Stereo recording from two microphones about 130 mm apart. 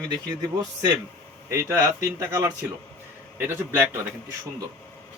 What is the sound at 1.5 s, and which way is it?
A man's voice, 25° right (ahead or behind).